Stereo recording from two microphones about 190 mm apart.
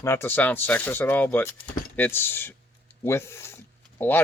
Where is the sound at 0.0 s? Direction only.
15° left (ahead or behind).